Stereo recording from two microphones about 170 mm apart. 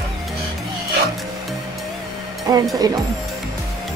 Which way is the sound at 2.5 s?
20° right (ahead or behind).